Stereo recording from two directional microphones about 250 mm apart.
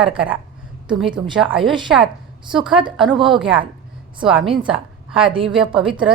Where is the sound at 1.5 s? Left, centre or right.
Centre.